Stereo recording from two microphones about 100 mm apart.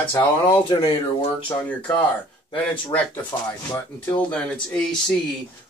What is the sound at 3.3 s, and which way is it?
Speech, 45° left (ahead or behind).